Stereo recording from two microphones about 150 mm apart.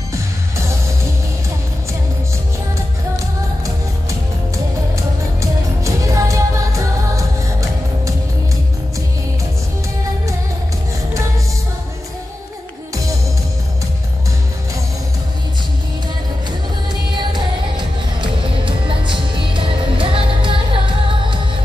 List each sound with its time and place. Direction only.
4.9 s music: 20° right (ahead or behind)
16.9 s music: 30° right (ahead or behind)